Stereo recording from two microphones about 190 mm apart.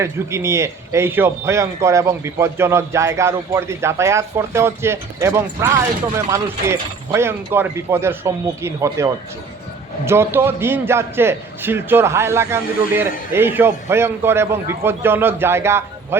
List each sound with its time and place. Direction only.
0.0 s a man's voice: 15° right (ahead or behind)
10.1 s a man's voice: 10° right (ahead or behind)